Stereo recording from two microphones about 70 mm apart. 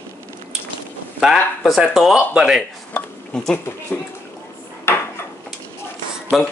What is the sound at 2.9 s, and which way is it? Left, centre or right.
Dishes, centre.